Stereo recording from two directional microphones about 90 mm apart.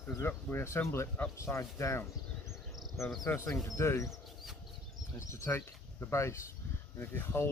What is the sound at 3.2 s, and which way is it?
Speech, 30° left (ahead or behind).